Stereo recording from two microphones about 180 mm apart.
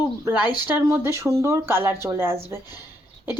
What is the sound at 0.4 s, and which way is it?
Speech, 25° left (ahead or behind).